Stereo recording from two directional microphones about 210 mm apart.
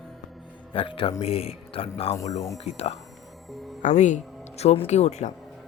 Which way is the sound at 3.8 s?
35° left (ahead or behind).